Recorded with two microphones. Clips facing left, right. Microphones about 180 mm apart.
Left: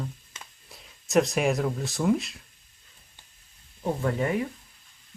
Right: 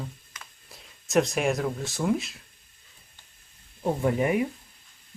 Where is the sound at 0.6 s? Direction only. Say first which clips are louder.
Even; centre (ahead or behind).